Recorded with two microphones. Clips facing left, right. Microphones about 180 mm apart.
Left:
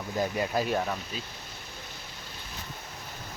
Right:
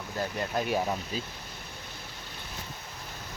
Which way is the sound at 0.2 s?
5° left (ahead or behind).